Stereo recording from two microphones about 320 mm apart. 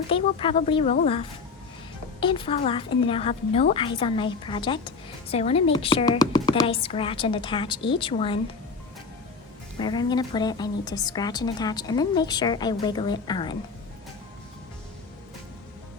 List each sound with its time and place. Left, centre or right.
0.1 s a woman's voice: centre
9.7 s a woman's voice: centre